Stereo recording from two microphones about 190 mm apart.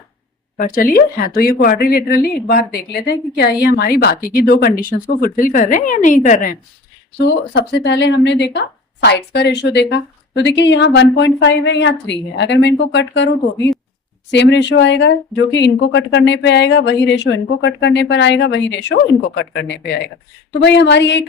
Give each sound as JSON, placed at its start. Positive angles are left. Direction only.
{"t": 0.5, "sound": "speech", "side_deg": 45}
{"t": 7.2, "sound": "speech", "side_deg": 65}